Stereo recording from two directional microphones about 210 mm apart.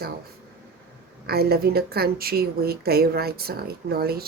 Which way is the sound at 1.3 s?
50° right (ahead or behind).